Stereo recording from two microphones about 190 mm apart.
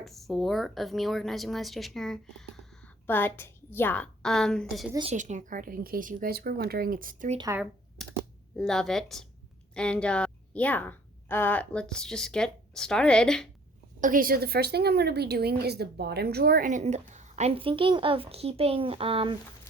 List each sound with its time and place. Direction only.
0.0 s speech: centre (ahead or behind)
5.1 s a woman's voice: 40° right (ahead or behind)
7.3 s speech: 15° right (ahead or behind)
8.0 s a sound: centre (ahead or behind)
8.5 s a woman's voice: centre (ahead or behind)
14.0 s a woman's voice: 45° right (ahead or behind); by 19.4 s 30° right (ahead or behind)